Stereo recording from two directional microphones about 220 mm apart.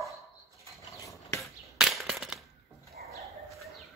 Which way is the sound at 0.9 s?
15° left (ahead or behind).